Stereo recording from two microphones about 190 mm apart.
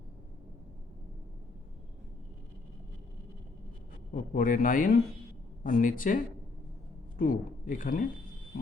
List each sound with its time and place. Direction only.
4.1 s speech: 45° left (ahead or behind)